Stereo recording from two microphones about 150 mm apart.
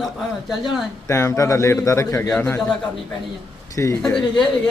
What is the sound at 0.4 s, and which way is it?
Speech, centre (ahead or behind).